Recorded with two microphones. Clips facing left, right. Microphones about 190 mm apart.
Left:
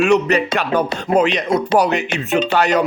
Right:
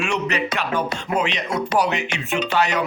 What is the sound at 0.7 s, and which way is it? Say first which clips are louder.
Speech: left 9 dB; 40° left (ahead or behind).